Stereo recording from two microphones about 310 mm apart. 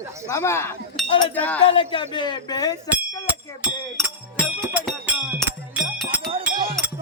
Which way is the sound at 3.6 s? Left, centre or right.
Centre.